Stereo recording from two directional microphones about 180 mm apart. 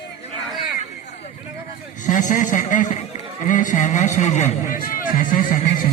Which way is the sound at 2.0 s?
45° left (ahead or behind).